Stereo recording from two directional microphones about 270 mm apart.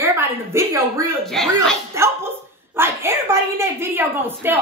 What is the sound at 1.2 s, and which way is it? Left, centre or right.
Speech, centre.